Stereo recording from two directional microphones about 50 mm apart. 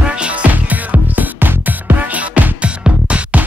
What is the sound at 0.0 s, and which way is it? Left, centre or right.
Music, right.